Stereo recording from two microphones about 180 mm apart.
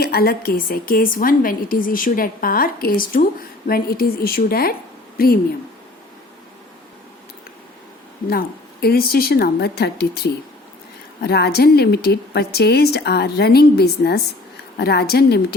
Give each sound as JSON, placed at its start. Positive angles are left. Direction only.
{"t": 0.0, "sound": "a woman's voice", "side_deg": 60}
{"t": 8.3, "sound": "a woman's voice", "side_deg": 60}